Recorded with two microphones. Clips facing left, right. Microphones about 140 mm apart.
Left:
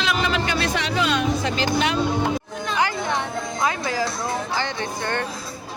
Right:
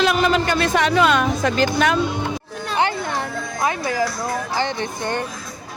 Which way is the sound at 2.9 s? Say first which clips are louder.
Even; 20° left (ahead or behind).